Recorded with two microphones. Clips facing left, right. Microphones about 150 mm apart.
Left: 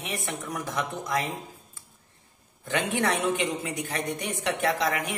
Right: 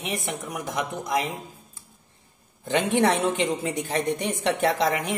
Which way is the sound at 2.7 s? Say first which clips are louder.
Right 5 dB; 25° right (ahead or behind).